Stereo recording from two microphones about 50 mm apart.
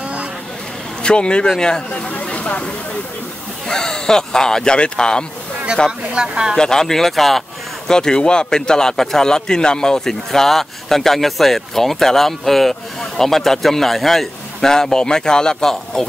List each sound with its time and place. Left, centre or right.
1.0 s speech: centre
3.6 s a man's voice: centre
5.9 s speech: centre
6.5 s a man's voice: centre